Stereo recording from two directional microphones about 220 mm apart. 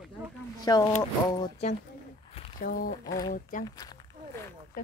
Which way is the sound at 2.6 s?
40° left (ahead or behind).